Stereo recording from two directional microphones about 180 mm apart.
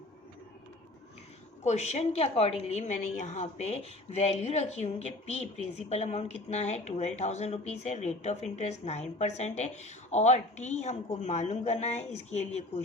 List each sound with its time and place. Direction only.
1.6 s speech: 40° left (ahead or behind)